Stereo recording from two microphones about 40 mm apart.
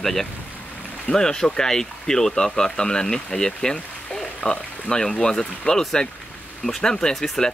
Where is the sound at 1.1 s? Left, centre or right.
Centre.